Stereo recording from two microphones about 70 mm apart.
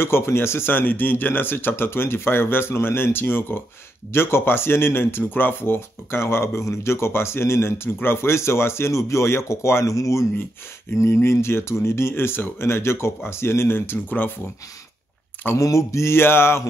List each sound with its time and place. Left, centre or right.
0.0 s speech: left
15.5 s speech: left